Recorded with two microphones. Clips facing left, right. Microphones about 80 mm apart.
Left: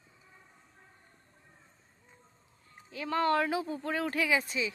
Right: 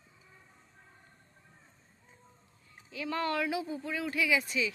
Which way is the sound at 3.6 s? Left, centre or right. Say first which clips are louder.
Left 3 dB; left.